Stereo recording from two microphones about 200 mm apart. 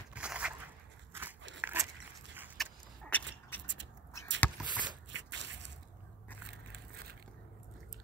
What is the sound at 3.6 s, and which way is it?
Cat, 65° right (ahead or behind).